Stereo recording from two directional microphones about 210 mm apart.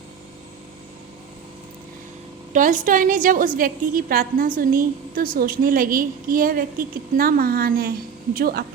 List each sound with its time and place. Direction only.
2.5 s a woman's voice: 35° right (ahead or behind)